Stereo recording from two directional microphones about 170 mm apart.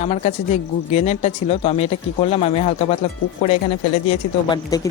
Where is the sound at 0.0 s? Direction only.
40° left (ahead or behind).